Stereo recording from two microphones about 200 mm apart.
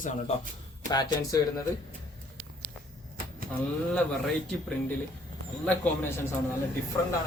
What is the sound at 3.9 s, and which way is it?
Speech, 5° left (ahead or behind).